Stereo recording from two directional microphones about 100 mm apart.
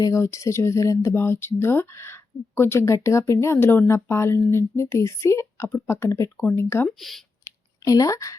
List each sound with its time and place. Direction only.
0.0 s speech: 30° left (ahead or behind)
6.8 s speech: centre (ahead or behind)
7.9 s speech: 35° left (ahead or behind)